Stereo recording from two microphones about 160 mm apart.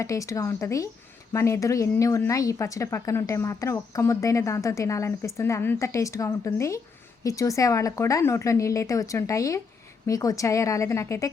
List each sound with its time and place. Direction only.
0.0 s a woman's voice: 20° left (ahead or behind)